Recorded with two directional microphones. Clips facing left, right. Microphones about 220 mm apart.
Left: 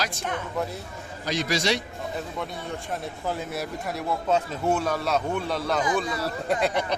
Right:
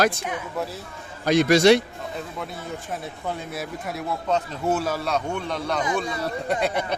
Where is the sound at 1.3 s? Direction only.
55° right (ahead or behind).